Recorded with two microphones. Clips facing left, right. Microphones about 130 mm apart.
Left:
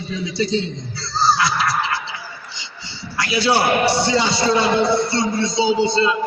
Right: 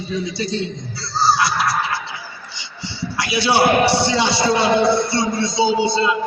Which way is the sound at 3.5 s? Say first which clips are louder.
Right 4 dB; 75° right (ahead or behind).